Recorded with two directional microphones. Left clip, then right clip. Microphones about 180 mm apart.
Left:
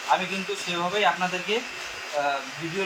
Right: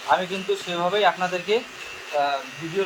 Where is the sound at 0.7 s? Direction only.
60° right (ahead or behind).